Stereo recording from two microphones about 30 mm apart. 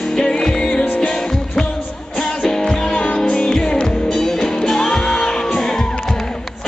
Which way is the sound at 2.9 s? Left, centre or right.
Left.